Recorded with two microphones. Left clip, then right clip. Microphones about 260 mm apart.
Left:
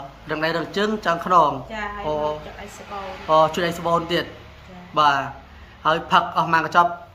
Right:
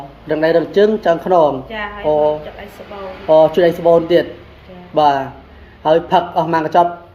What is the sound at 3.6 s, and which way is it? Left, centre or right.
Speech, centre.